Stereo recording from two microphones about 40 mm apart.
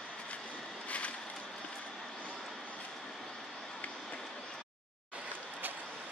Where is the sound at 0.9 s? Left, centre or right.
Left.